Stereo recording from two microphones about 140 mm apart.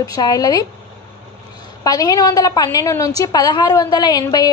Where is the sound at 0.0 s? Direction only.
25° left (ahead or behind).